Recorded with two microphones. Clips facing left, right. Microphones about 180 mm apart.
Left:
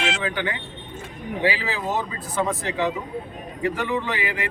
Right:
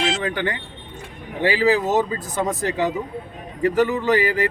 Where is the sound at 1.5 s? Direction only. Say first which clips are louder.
Right 9 dB; 45° right (ahead or behind).